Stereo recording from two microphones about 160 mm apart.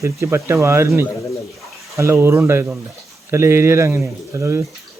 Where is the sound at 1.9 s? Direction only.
15° right (ahead or behind).